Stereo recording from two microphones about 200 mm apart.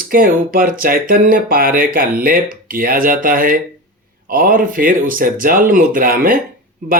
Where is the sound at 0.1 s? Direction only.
45° right (ahead or behind).